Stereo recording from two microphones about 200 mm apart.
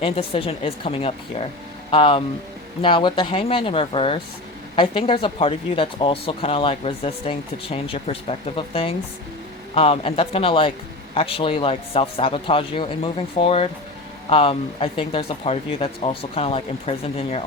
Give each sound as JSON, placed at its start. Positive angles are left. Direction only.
{"t": 0.0, "sound": "speech", "side_deg": 30}